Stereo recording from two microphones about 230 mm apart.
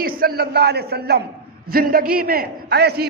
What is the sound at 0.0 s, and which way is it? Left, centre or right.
A man's voice, right.